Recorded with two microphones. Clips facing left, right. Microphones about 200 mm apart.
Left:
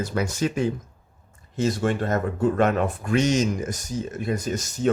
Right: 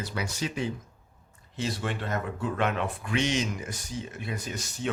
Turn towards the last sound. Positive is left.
turn(degrees=45)  # may be behind; listen again after turning